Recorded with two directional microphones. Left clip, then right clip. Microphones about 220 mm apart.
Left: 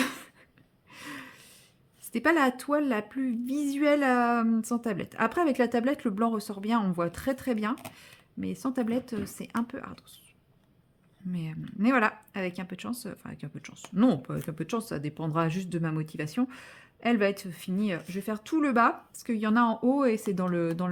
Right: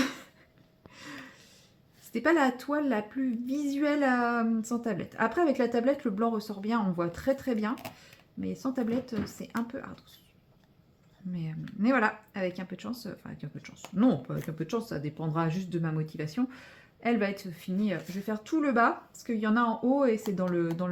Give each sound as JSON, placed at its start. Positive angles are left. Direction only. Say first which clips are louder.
{"t": 0.0, "sound": "a sound", "louder": "left 1 dB", "side_deg": 40}
{"t": 2.1, "sound": "a woman's voice", "louder": "left 1 dB", "side_deg": 40}
{"t": 11.3, "sound": "a woman's voice", "louder": "left 2 dB", "side_deg": 40}